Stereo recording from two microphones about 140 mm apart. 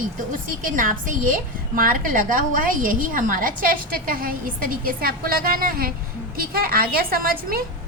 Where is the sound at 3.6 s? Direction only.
90° right.